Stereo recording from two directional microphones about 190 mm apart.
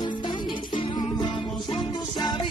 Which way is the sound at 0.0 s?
25° left (ahead or behind).